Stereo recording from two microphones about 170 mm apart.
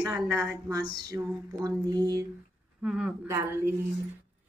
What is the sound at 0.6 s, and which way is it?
Speech, 20° right (ahead or behind).